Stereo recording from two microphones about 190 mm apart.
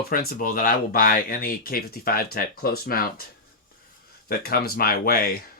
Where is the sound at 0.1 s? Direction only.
50° left (ahead or behind).